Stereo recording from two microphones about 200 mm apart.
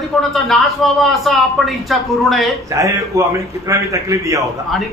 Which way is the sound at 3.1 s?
15° right (ahead or behind).